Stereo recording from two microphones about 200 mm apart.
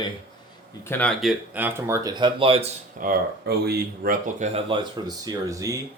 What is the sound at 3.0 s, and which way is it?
Speech, 50° right (ahead or behind).